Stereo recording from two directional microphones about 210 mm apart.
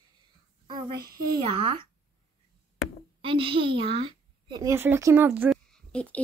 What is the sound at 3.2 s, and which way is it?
A woman's voice, 25° right (ahead or behind).